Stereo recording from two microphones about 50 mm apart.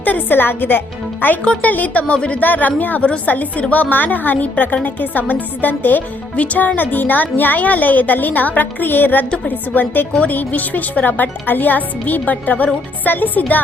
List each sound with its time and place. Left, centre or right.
0.0 s a woman's voice: left
1.5 s a woman's voice: left
2.4 s a woman's voice: left